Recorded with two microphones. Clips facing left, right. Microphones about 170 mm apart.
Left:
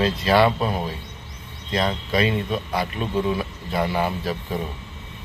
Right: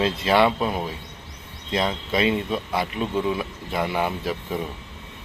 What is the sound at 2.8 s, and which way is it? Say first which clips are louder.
A man's voice: even; 15° right (ahead or behind).